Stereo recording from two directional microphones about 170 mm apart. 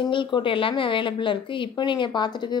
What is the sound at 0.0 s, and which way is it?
Speech, 30° left (ahead or behind).